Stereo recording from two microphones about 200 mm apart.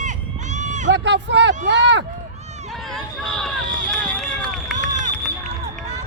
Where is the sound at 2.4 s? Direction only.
35° right (ahead or behind).